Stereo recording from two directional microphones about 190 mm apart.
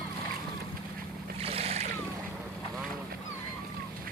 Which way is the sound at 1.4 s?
30° right (ahead or behind).